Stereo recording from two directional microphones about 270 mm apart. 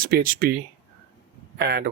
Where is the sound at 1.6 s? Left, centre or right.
Right.